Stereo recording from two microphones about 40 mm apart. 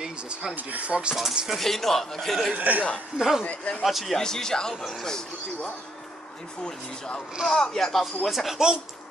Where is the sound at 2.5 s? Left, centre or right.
Right.